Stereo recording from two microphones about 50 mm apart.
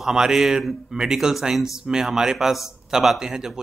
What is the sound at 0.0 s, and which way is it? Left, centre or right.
A man's voice, centre.